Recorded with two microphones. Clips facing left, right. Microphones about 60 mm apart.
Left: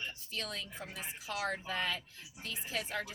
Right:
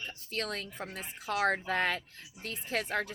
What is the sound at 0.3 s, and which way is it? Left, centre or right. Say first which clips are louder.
A woman's voice: right 9 dB; right.